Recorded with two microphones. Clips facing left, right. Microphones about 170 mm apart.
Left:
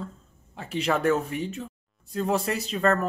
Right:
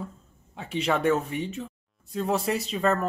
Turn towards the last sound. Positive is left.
turn(degrees=0)  # may be behind; listen again after turning